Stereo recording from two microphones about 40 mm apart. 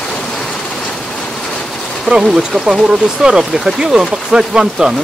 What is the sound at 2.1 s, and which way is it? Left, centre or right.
Speech, right.